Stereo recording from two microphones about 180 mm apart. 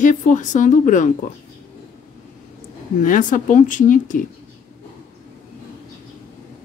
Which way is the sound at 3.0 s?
45° left (ahead or behind).